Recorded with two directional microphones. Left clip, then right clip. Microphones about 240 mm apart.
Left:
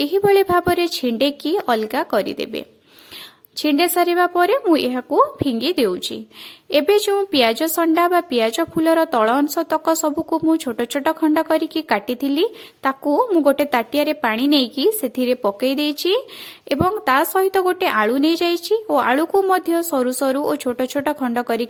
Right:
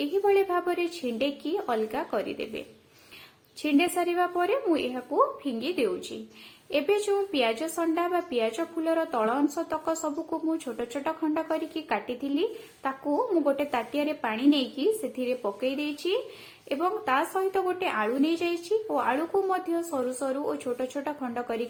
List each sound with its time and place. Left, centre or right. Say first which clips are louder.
0.0 s a woman's voice: left 9 dB; left